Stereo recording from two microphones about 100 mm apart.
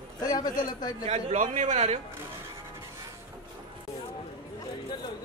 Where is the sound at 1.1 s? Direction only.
90° right.